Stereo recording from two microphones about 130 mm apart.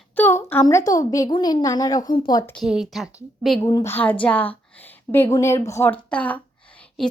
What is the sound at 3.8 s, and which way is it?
A woman's voice, 15° left (ahead or behind).